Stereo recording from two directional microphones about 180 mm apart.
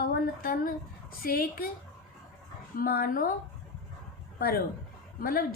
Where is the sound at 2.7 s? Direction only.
55° left (ahead or behind).